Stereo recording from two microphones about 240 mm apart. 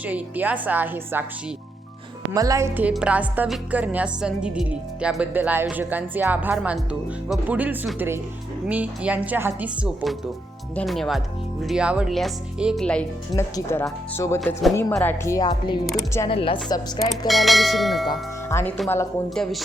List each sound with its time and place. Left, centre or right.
0.0 s a woman's voice: centre
2.3 s a woman's voice: centre
17.1 s a woman's voice: centre
18.4 s a woman's voice: centre